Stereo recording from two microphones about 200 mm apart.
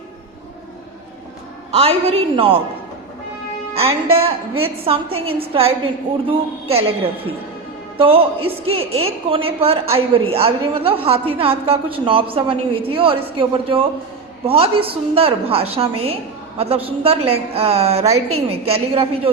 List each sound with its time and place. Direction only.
1.7 s a woman's voice: 30° right (ahead or behind)
3.8 s a woman's voice: 30° right (ahead or behind)